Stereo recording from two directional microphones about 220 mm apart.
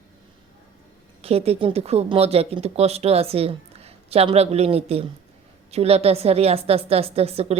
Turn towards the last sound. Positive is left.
turn(degrees=-25)  # may be behind; listen again after turning